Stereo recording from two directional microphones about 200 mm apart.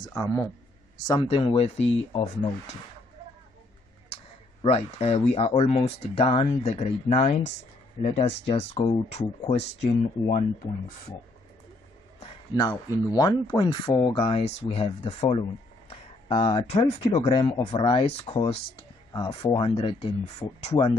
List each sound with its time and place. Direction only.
0.0 s speech: 15° left (ahead or behind)
1.0 s speech: 20° left (ahead or behind)
4.6 s speech: 30° left (ahead or behind)
12.2 s speech: 20° left (ahead or behind)